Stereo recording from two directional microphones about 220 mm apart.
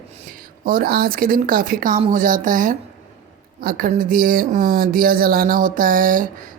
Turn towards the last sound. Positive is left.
turn(degrees=-40)  # may be behind; listen again after turning